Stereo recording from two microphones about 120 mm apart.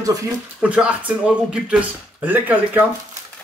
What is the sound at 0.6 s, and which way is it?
Speech, 10° right (ahead or behind).